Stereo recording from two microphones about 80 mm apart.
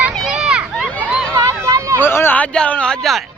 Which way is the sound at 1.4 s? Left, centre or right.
Right.